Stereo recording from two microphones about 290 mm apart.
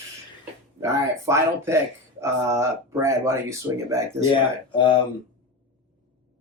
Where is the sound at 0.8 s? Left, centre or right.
Centre.